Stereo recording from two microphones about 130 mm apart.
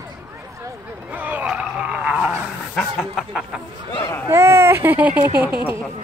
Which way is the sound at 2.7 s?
Centre (ahead or behind).